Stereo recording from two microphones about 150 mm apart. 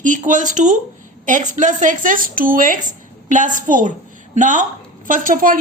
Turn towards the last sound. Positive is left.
turn(degrees=-65)  # may be behind; listen again after turning